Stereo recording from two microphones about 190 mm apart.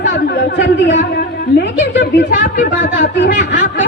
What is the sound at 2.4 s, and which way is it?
Speech, 45° left (ahead or behind).